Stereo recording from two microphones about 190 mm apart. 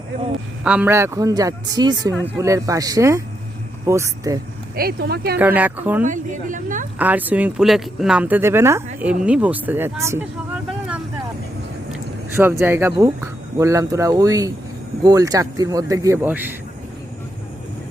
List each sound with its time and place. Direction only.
0.6 s speech: 5° right (ahead or behind)
4.7 s speech: 55° right (ahead or behind)
5.4 s speech: 10° right (ahead or behind)
6.1 s speech: 45° right (ahead or behind)
7.0 s speech: 10° right (ahead or behind)
12.4 s speech: 10° right (ahead or behind)